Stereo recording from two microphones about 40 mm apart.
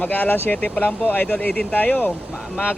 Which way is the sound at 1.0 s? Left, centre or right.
Left.